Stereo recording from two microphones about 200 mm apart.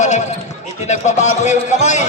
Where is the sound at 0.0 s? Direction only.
35° left (ahead or behind).